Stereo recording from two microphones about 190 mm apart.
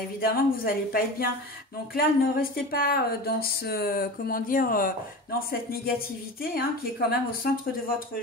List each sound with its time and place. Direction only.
0.2 s a woman's voice: 50° left (ahead or behind)